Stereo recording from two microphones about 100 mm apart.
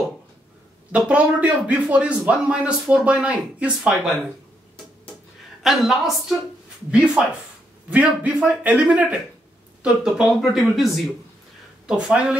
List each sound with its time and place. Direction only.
0.9 s a man's voice: 15° right (ahead or behind)
5.6 s a man's voice: 5° right (ahead or behind)